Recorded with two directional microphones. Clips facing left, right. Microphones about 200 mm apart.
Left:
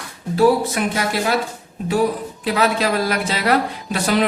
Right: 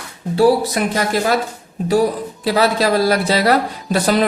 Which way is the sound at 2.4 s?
35° right (ahead or behind).